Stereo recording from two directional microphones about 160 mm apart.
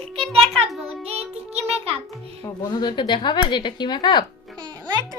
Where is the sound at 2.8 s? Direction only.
25° left (ahead or behind).